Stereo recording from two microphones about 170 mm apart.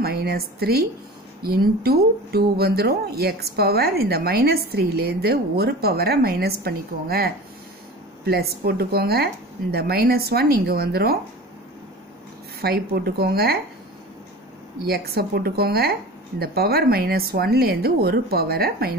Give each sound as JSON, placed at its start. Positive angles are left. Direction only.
{"t": 0.0, "sound": "speech", "side_deg": -70}
{"t": 12.5, "sound": "speech", "side_deg": -65}
{"t": 14.9, "sound": "speech", "side_deg": -65}